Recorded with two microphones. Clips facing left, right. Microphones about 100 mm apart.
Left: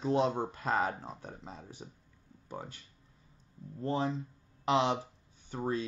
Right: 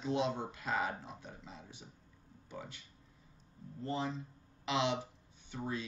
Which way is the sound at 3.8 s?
55° left (ahead or behind).